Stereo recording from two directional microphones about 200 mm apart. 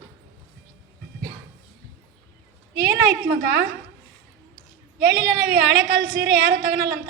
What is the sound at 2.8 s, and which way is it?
Speech, 55° right (ahead or behind).